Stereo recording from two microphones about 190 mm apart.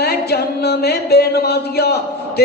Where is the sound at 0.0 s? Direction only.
55° left (ahead or behind).